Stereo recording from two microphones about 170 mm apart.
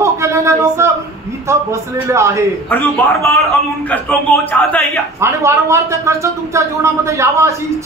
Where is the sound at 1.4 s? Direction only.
15° right (ahead or behind).